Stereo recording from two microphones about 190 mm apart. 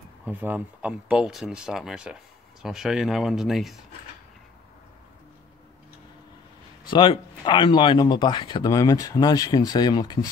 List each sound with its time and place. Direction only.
0.2 s speech: 10° right (ahead or behind)
6.9 s speech: 25° left (ahead or behind)